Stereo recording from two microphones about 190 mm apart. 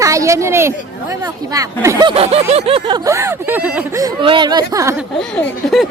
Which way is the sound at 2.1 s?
30° right (ahead or behind).